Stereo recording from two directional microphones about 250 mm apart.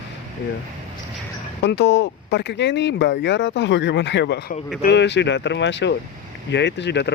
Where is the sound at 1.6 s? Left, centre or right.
Left.